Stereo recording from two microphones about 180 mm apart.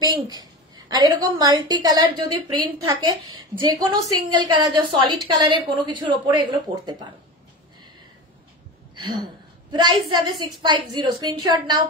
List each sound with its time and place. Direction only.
0.0 s a woman's voice: 20° right (ahead or behind)
8.9 s a woman's voice: 25° right (ahead or behind)